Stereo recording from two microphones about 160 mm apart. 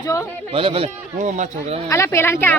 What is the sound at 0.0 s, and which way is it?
Speech, 20° left (ahead or behind).